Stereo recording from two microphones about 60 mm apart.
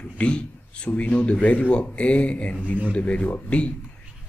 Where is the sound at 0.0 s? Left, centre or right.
Centre.